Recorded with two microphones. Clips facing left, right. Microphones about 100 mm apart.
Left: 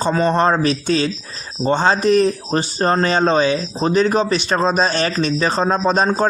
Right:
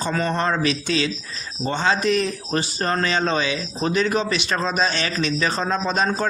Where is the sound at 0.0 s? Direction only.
30° left (ahead or behind).